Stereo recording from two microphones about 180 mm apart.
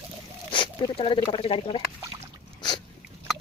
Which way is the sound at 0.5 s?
25° left (ahead or behind).